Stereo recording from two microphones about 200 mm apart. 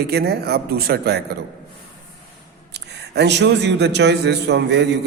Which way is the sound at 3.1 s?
60° right (ahead or behind).